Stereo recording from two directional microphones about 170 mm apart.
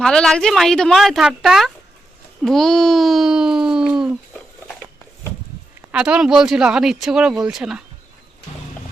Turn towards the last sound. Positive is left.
turn(degrees=-5)  # may be behind; listen again after turning